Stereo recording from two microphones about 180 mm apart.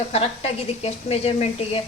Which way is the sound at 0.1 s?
35° left (ahead or behind).